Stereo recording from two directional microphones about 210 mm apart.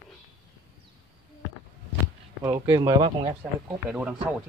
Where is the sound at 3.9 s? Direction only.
5° right (ahead or behind).